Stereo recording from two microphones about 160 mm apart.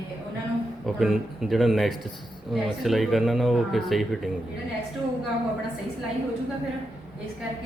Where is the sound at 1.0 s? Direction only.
Centre (ahead or behind).